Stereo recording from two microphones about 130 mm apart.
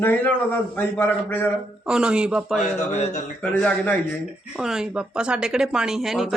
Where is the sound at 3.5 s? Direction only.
10° left (ahead or behind).